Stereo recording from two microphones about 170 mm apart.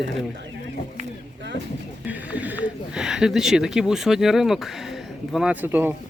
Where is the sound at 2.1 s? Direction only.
10° right (ahead or behind).